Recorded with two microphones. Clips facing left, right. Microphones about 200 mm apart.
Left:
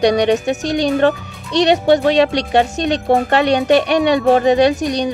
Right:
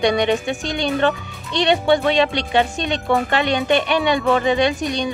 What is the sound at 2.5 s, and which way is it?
Speech, 40° left (ahead or behind).